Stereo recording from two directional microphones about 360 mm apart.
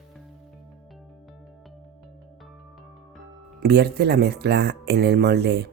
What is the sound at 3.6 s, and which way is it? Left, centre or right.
Speech, right.